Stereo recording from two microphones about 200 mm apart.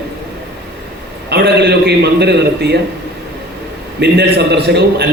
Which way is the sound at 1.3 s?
55° right (ahead or behind).